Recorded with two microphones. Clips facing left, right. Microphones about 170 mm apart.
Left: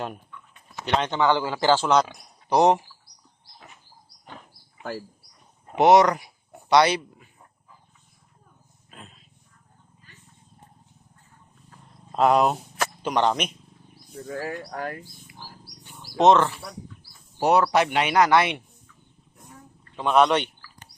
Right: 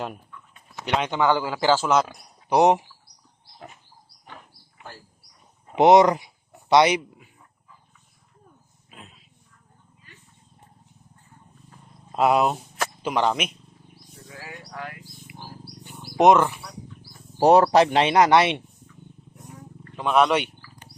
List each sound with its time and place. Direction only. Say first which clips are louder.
0.0 s speech: even; 5° right (ahead or behind)
2.6 s speech: right 1 dB; 15° right (ahead or behind)
5.7 s speech: right 2 dB; 20° right (ahead or behind)
8.9 s a sound: even; 5° right (ahead or behind)
12.1 s speech: left 1 dB; 5° right (ahead or behind)
14.3 s speech: left 10 dB; 50° left (ahead or behind)
15.3 s wild animals: right 4 dB; 20° right (ahead or behind)
17.3 s speech: right 4 dB; 40° right (ahead or behind)
20.0 s speech: even; centre (ahead or behind)